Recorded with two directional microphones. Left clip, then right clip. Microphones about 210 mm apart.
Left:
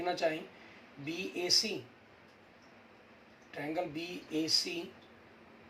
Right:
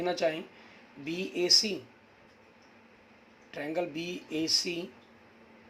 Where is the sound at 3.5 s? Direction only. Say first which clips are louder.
Right 4 dB; 55° right (ahead or behind).